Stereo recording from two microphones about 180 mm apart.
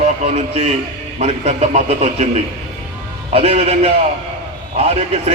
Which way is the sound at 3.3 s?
35° right (ahead or behind).